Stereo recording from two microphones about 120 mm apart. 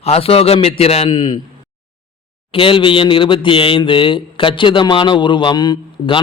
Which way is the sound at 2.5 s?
45° left (ahead or behind).